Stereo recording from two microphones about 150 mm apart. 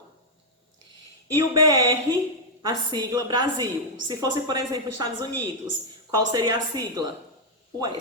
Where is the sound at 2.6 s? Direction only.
25° right (ahead or behind).